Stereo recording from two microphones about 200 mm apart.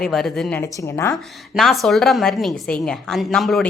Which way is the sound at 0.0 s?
Centre (ahead or behind).